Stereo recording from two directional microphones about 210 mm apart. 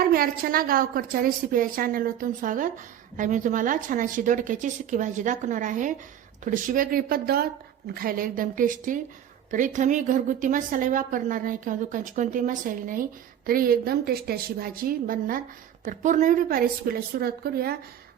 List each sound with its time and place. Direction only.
0.0 s a woman's voice: 45° right (ahead or behind)